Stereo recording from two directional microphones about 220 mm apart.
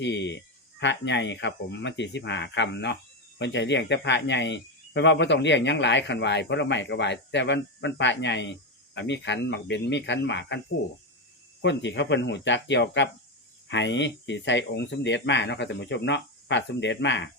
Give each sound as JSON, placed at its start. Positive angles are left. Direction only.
{"t": 0.0, "sound": "speech", "side_deg": 55}
{"t": 11.6, "sound": "speech", "side_deg": 55}